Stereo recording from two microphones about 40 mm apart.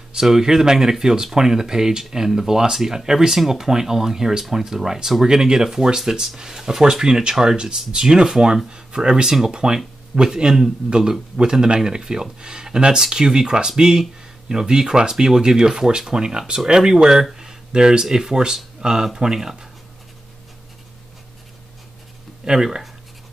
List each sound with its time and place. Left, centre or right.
0.1 s speech: centre
22.4 s speech: centre